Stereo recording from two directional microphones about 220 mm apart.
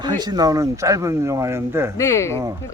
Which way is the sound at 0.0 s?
20° right (ahead or behind).